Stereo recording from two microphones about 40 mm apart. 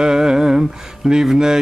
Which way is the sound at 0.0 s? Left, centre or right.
Centre.